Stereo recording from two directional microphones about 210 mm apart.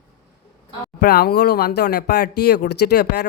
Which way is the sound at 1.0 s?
50° left (ahead or behind).